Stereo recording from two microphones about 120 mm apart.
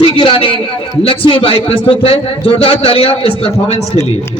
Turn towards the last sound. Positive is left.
turn(degrees=55)  # may be behind; listen again after turning